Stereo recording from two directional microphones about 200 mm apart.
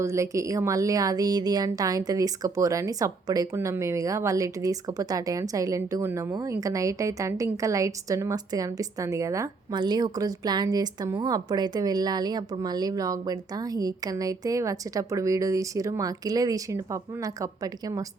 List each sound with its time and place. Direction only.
0.0 s a woman's voice: 15° right (ahead or behind)